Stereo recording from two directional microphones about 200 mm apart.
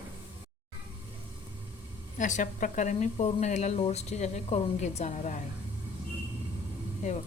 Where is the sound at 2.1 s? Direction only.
40° left (ahead or behind).